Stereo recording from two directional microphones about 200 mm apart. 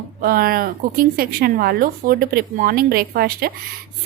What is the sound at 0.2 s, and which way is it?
A woman's voice, 45° right (ahead or behind).